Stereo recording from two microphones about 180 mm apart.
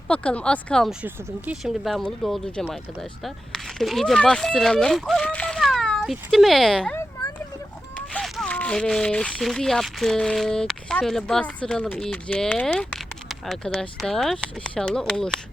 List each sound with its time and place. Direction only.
0.1 s speech: 5° left (ahead or behind)
6.9 s a sound: 20° left (ahead or behind)
7.9 s speech: 5° left (ahead or behind)